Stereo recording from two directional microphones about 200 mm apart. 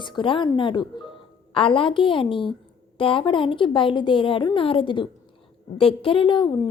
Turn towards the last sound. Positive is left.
turn(degrees=25)  # may be behind; listen again after turning